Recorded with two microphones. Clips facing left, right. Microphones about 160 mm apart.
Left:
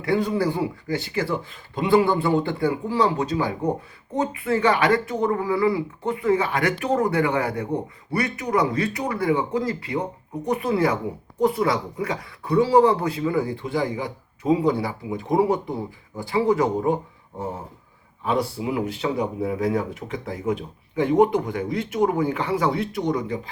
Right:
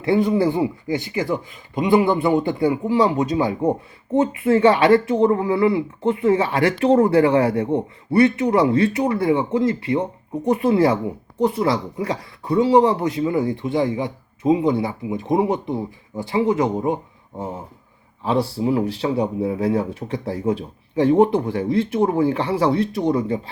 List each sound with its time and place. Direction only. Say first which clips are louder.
0.0 s speech: right 4 dB; 20° right (ahead or behind)
18.2 s speech: right 3 dB; 30° right (ahead or behind)